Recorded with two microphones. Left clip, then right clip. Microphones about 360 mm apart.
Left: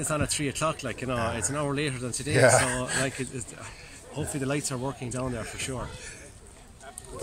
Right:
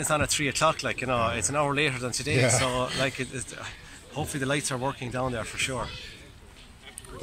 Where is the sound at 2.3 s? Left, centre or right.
Left.